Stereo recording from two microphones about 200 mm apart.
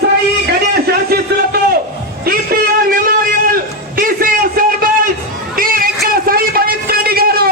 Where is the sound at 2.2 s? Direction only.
50° right (ahead or behind).